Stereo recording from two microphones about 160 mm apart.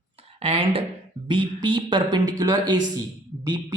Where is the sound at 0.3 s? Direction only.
40° right (ahead or behind).